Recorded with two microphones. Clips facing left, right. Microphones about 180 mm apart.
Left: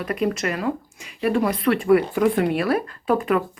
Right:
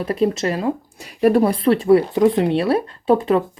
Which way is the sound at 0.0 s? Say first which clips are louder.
Right 4 dB; 30° right (ahead or behind).